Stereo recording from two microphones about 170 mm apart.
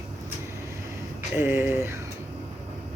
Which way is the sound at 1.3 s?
10° right (ahead or behind).